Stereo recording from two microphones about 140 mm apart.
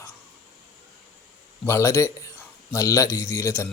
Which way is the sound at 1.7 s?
20° left (ahead or behind).